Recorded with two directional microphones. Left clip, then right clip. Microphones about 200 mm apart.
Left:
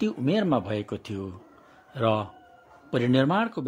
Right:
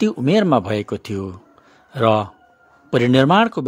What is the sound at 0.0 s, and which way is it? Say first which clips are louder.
Speech: right 9 dB; 30° right (ahead or behind).